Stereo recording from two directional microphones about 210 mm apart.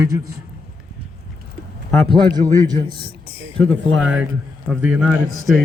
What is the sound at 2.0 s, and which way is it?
Speech, 20° right (ahead or behind).